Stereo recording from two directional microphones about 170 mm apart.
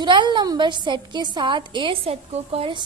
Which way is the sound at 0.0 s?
25° right (ahead or behind).